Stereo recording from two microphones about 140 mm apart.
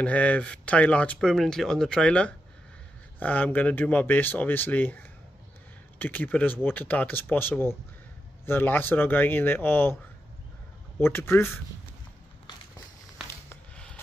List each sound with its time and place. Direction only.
0.0 s speech: 10° left (ahead or behind)
11.0 s speech: 15° left (ahead or behind)
13.5 s a sound: 5° left (ahead or behind)